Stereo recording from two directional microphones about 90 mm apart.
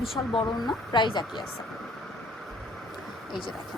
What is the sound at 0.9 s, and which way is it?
Speech, 60° left (ahead or behind).